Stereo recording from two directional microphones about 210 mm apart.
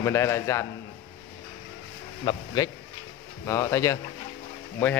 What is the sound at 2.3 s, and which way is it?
Speech, 15° left (ahead or behind).